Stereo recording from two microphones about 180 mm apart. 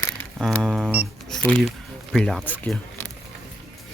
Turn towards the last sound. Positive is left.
turn(degrees=5)  # may be behind; listen again after turning